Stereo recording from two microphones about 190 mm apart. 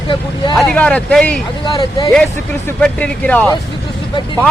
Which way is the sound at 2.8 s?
5° left (ahead or behind).